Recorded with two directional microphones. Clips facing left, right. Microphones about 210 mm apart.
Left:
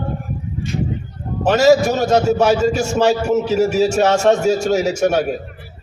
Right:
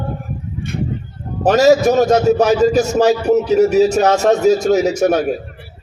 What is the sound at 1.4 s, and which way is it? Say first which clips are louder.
A man's voice: right 1 dB; 35° right (ahead or behind).